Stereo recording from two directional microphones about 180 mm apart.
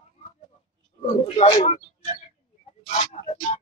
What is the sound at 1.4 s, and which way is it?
Speech, 35° left (ahead or behind).